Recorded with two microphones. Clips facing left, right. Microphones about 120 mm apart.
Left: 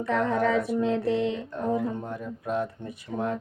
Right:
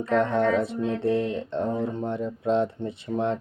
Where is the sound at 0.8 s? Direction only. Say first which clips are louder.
Even; 85° left.